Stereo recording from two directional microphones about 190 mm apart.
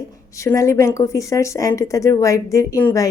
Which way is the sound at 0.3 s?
15° left (ahead or behind).